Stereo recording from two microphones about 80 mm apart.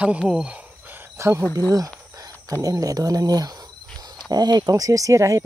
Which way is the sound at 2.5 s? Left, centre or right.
Right.